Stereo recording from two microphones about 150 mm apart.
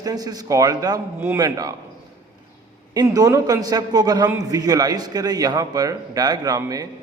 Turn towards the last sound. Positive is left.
turn(degrees=-25)  # may be behind; listen again after turning